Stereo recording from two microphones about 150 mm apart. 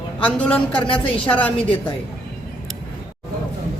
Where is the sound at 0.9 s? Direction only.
35° left (ahead or behind).